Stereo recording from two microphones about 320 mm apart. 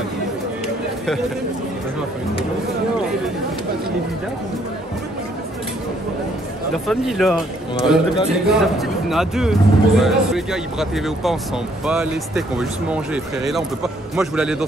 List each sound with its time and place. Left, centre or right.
6.7 s speech: centre